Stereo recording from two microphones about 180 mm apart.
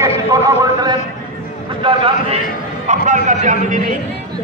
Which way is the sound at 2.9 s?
45° right (ahead or behind).